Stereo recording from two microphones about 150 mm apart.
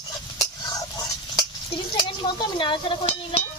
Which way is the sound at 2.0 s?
30° left (ahead or behind).